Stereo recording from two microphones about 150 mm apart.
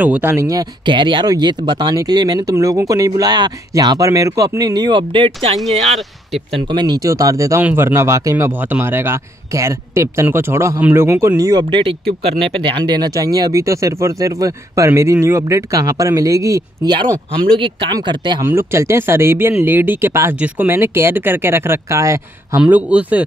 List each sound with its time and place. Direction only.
0.0 s speech: 10° right (ahead or behind); by 5.6 s 40° right (ahead or behind)
6.7 s speech: 30° right (ahead or behind)
17.6 s speech: 30° right (ahead or behind)
18.4 s speech: 15° right (ahead or behind)
22.6 s speech: 10° right (ahead or behind)